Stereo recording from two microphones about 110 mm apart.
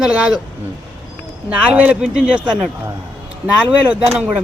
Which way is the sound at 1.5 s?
10° right (ahead or behind).